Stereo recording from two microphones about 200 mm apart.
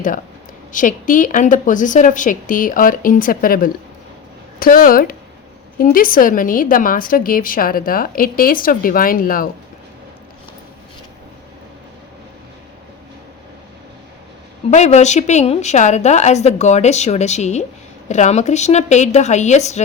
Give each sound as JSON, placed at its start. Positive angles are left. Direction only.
{"t": 0.7, "sound": "a woman's voice", "side_deg": 40}
{"t": 14.7, "sound": "a woman's voice", "side_deg": 35}